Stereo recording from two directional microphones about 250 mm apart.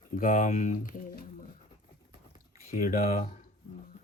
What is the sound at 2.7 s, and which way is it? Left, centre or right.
Speech, left.